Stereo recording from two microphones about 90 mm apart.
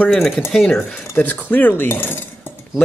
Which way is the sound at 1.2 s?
20° left (ahead or behind).